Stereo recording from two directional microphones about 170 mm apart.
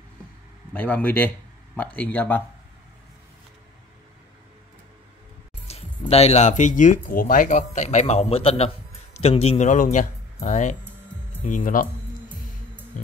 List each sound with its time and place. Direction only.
0.7 s speech: 10° left (ahead or behind)
5.7 s speech: 40° left (ahead or behind); by 11.9 s 55° left (ahead or behind)